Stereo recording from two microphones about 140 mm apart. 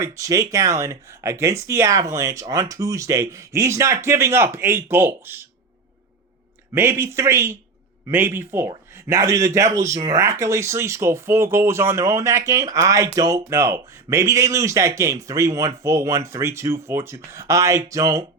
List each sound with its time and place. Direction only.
0.0 s speech: 20° right (ahead or behind)
6.7 s a man's voice: 15° right (ahead or behind)